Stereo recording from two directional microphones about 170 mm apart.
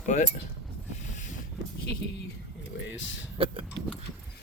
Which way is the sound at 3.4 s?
30° right (ahead or behind).